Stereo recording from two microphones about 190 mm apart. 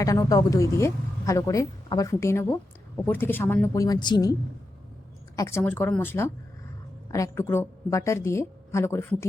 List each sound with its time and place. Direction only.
0.0 s a woman's voice: 15° left (ahead or behind)
5.4 s a woman's voice: 15° left (ahead or behind)